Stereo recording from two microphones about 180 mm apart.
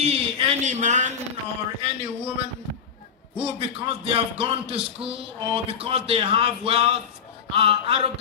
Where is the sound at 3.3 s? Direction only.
30° right (ahead or behind).